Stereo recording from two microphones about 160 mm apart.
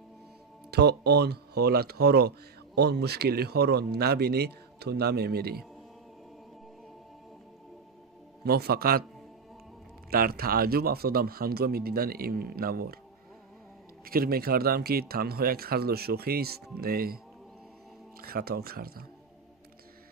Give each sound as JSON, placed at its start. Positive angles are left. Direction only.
{"t": 0.7, "sound": "speech", "side_deg": -90}
{"t": 8.5, "sound": "speech", "side_deg": -80}
{"t": 10.0, "sound": "speech", "side_deg": -70}
{"t": 14.0, "sound": "speech", "side_deg": -70}
{"t": 18.2, "sound": "speech", "side_deg": -70}